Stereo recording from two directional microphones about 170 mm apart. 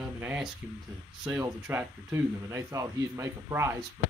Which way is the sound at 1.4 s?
15° right (ahead or behind).